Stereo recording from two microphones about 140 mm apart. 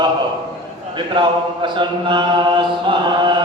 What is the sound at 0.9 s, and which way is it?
Mantra, 35° right (ahead or behind).